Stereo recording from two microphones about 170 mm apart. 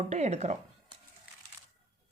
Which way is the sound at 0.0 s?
40° right (ahead or behind).